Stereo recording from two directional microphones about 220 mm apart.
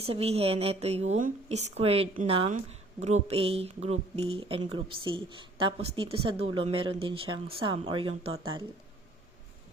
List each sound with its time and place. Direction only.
0.0 s a woman's voice: 25° right (ahead or behind)